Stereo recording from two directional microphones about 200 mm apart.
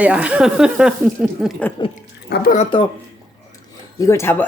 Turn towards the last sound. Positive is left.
turn(degrees=10)  # may be behind; listen again after turning